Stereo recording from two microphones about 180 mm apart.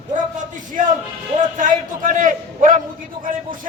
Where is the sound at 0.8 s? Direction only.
45° right (ahead or behind).